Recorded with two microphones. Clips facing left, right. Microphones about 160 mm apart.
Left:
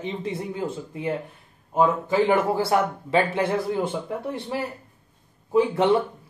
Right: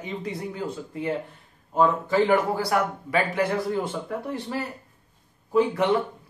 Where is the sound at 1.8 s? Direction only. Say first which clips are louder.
Even; 20° left (ahead or behind).